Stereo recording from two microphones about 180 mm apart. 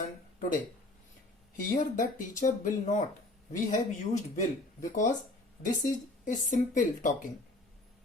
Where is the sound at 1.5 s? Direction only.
45° left (ahead or behind).